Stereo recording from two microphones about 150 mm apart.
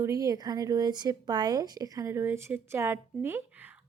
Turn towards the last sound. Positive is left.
turn(degrees=-15)  # may be behind; listen again after turning